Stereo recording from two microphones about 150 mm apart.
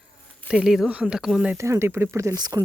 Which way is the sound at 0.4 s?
5° right (ahead or behind).